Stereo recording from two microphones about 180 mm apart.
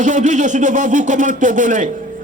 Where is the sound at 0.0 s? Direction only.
45° right (ahead or behind).